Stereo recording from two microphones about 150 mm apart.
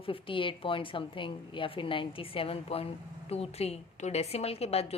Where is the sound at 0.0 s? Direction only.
35° left (ahead or behind).